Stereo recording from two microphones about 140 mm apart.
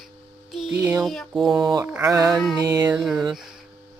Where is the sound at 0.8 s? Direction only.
15° right (ahead or behind).